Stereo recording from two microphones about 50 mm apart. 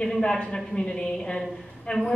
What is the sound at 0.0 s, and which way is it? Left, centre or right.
A woman's voice, centre.